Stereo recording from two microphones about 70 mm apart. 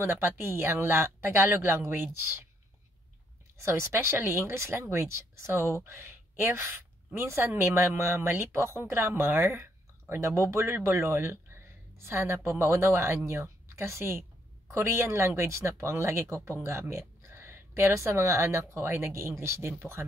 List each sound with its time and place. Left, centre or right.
0.0 s speech: right
3.5 s a woman's voice: right